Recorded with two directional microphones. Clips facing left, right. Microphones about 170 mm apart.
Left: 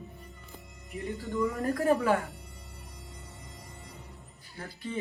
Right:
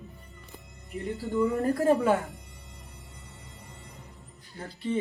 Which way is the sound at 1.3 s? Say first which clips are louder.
Right 4 dB; 30° right (ahead or behind).